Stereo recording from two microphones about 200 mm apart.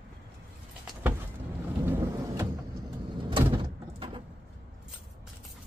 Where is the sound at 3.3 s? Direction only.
25° right (ahead or behind).